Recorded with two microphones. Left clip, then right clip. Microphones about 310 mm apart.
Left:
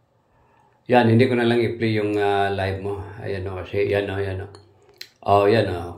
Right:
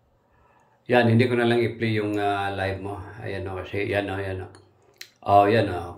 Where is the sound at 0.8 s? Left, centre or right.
Centre.